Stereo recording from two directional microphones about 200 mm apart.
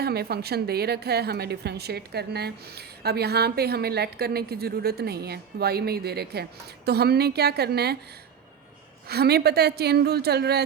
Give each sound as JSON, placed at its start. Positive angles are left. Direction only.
{"t": 0.0, "sound": "a woman's voice", "side_deg": -50}
{"t": 9.0, "sound": "a woman's voice", "side_deg": -50}